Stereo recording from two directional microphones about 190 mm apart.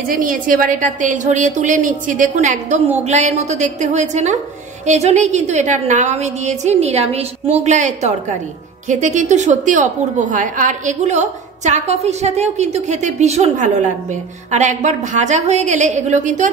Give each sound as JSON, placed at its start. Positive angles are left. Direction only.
{"t": 0.1, "sound": "a woman's voice", "side_deg": -45}